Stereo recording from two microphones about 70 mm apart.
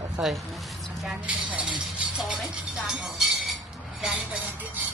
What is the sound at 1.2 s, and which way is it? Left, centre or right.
Chink, centre.